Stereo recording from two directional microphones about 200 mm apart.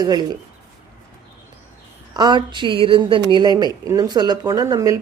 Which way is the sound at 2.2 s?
20° right (ahead or behind).